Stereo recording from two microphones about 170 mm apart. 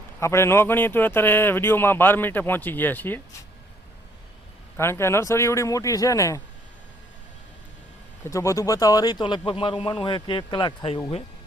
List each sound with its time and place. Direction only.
0.2 s a man's voice: 15° left (ahead or behind)
4.8 s a man's voice: 15° left (ahead or behind)
8.2 s speech: 15° left (ahead or behind)